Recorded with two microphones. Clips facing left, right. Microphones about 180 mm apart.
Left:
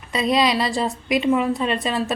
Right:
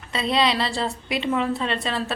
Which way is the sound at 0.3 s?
25° right (ahead or behind).